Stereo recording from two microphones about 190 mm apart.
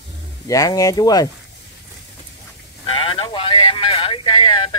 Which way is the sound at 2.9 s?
25° left (ahead or behind).